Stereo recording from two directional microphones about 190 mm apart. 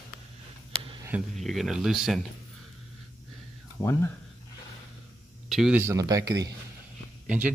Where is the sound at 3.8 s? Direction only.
10° left (ahead or behind).